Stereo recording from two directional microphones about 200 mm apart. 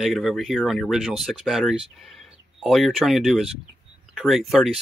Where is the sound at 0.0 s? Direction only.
Centre (ahead or behind).